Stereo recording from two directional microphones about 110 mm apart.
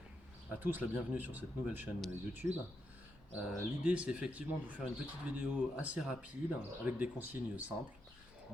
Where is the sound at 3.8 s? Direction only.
10° right (ahead or behind).